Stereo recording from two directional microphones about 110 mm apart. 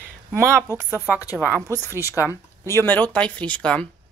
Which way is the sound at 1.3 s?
20° right (ahead or behind).